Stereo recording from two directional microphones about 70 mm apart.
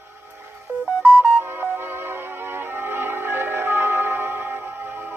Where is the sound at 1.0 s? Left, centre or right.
Right.